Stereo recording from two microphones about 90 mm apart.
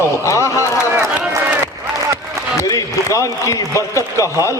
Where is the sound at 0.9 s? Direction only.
20° right (ahead or behind).